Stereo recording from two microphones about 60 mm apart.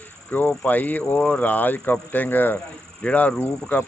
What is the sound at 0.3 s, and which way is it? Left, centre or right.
Speech, left.